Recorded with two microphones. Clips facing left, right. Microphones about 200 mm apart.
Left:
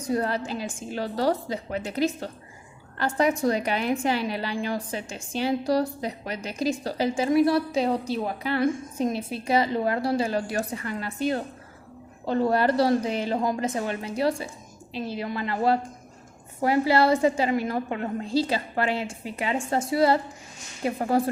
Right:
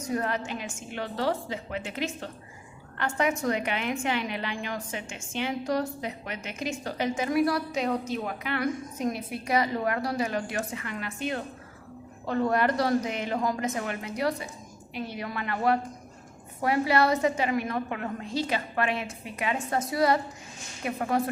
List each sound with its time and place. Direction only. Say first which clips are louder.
0.0 s a woman's voice: left 3 dB; 35° left (ahead or behind)